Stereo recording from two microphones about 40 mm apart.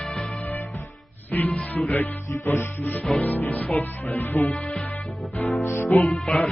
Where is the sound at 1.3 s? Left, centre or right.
Left.